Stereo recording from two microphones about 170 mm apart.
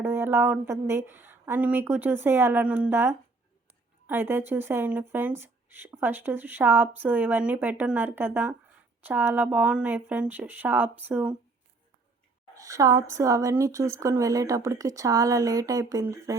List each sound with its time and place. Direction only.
0.0 s speech: 15° right (ahead or behind)
12.5 s a woman's voice: 20° right (ahead or behind)